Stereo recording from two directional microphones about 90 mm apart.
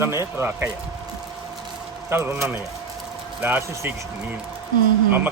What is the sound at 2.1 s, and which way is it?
Speech, 30° right (ahead or behind).